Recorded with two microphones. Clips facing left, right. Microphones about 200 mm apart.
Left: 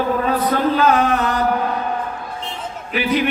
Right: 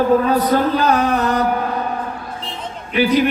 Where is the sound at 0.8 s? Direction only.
40° right (ahead or behind).